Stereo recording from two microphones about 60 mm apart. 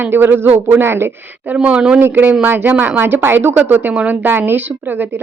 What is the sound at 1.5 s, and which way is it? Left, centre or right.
Speech, centre.